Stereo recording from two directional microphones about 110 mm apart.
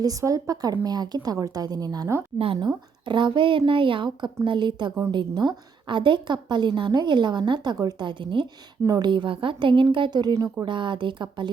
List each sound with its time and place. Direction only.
0.0 s a woman's voice: 30° right (ahead or behind)
10.7 s a woman's voice: 45° right (ahead or behind)